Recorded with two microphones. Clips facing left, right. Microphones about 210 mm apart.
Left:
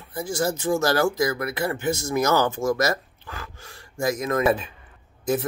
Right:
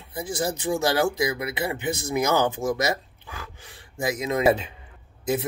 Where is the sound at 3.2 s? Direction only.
20° right (ahead or behind).